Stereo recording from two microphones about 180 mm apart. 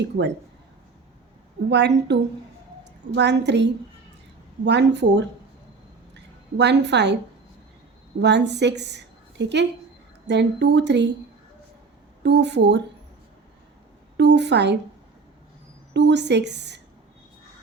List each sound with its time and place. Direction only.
0.0 s speech: 70° right (ahead or behind)
1.7 s speech: 75° right (ahead or behind)
3.2 s a woman's voice: 70° right (ahead or behind)
8.2 s speech: 70° right (ahead or behind)
12.2 s speech: 70° right (ahead or behind)
14.2 s speech: 75° right (ahead or behind)
15.9 s speech: 70° right (ahead or behind)